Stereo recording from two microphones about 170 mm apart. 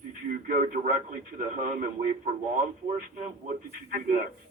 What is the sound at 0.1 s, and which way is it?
A man's voice, 50° right (ahead or behind).